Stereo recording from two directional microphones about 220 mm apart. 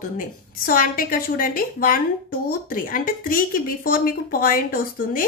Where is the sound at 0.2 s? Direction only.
40° left (ahead or behind).